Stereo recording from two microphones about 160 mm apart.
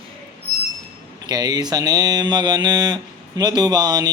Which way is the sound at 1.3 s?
25° right (ahead or behind).